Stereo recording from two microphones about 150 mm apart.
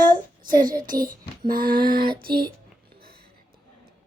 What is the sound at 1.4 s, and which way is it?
Female singing, 70° right (ahead or behind).